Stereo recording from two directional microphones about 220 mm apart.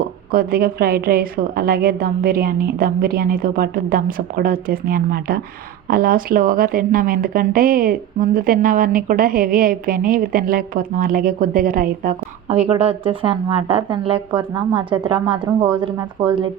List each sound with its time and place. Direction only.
0.3 s speech: 40° right (ahead or behind); by 16.5 s 20° right (ahead or behind)